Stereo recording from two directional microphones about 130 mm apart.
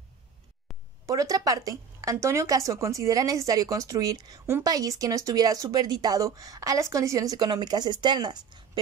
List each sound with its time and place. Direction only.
1.0 s speech: 25° right (ahead or behind)